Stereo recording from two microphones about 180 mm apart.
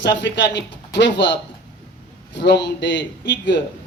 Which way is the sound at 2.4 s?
80° left.